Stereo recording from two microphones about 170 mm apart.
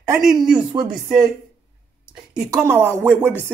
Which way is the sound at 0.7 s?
20° right (ahead or behind).